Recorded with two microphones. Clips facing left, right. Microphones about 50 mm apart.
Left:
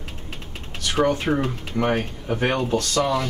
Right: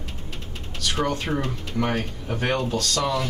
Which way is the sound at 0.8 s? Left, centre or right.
Centre.